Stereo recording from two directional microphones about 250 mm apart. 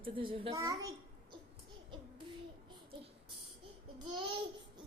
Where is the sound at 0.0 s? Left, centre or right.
Right.